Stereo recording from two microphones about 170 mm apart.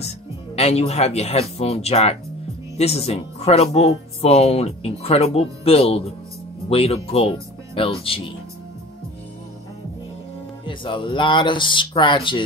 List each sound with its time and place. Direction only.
0.6 s speech: 35° left (ahead or behind)
10.6 s speech: 30° left (ahead or behind)